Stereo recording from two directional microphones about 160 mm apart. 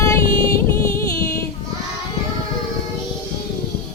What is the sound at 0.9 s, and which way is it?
Child singing, 15° left (ahead or behind).